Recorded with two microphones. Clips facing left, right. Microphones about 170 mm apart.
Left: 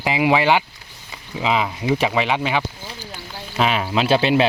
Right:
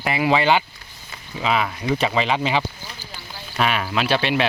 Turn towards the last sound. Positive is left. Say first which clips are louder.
# left 4 dB
turn(degrees=30)  # may be behind; listen again after turning